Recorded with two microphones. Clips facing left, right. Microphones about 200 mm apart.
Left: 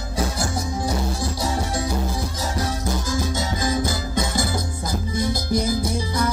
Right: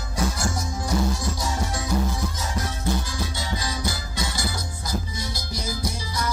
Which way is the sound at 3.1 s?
45° left (ahead or behind).